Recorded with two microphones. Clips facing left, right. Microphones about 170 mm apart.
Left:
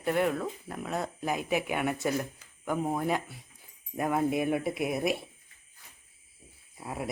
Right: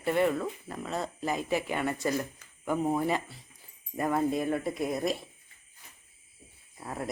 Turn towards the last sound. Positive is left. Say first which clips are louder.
# even
turn(degrees=5)  # may be behind; listen again after turning